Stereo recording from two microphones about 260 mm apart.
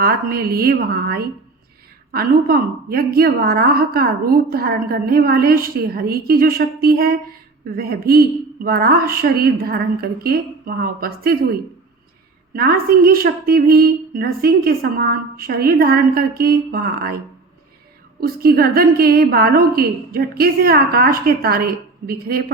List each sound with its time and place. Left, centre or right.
0.0 s a woman's voice: right
12.5 s a woman's voice: right
18.2 s a woman's voice: right